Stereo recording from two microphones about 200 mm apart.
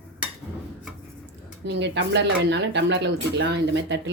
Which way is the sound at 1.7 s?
65° right (ahead or behind).